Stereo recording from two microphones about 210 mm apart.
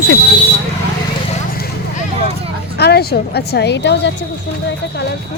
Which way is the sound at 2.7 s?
50° left (ahead or behind).